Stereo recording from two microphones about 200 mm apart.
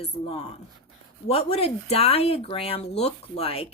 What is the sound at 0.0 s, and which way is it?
Speech, 30° left (ahead or behind).